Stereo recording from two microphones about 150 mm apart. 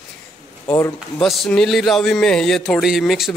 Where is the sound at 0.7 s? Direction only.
15° left (ahead or behind).